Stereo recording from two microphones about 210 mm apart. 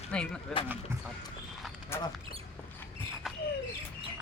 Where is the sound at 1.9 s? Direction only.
10° left (ahead or behind).